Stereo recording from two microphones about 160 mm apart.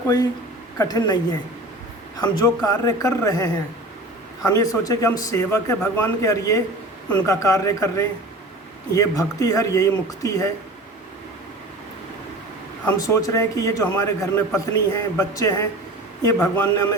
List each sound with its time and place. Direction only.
0.8 s a man's voice: 25° left (ahead or behind)
13.0 s a man's voice: 20° left (ahead or behind)